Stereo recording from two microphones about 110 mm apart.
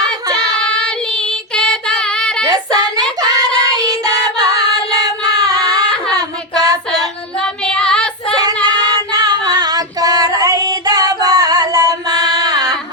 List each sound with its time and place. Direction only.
0.0 s child singing: 35° right (ahead or behind)
0.6 s child singing: 10° left (ahead or behind)
2.4 s child singing: 35° right (ahead or behind)
3.8 s music: 35° right (ahead or behind)
4.9 s child singing: 35° right (ahead or behind)
7.3 s child singing: 10° left (ahead or behind)
9.0 s female singing: 35° right (ahead or behind)